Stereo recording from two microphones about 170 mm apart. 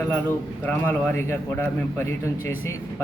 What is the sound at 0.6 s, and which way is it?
A man's voice, 10° left (ahead or behind).